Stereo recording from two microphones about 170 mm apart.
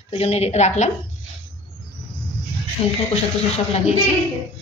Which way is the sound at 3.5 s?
40° left (ahead or behind).